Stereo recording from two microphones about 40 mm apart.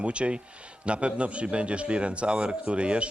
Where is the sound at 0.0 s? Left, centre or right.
Right.